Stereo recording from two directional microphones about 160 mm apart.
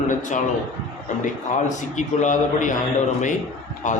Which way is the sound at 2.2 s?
50° left (ahead or behind).